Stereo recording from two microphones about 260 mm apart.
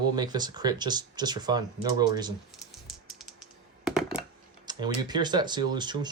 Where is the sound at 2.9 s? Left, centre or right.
Centre.